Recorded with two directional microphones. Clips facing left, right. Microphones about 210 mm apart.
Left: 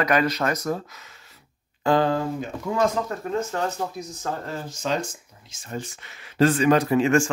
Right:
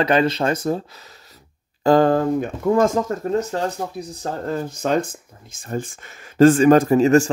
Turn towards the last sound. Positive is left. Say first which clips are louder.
# right 5 dB
turn(degrees=-40)  # may be behind; listen again after turning